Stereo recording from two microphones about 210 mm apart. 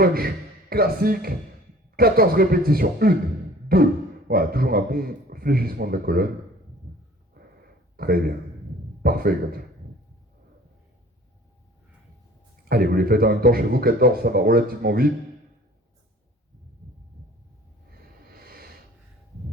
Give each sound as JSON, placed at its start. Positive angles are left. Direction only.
{"t": 0.0, "sound": "speech", "side_deg": -45}
{"t": 7.9, "sound": "speech", "side_deg": -45}
{"t": 12.6, "sound": "speech", "side_deg": -45}
{"t": 18.4, "sound": "snort", "side_deg": -45}